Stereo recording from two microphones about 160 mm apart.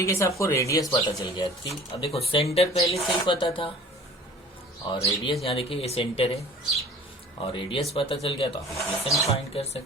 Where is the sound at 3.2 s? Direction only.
30° left (ahead or behind).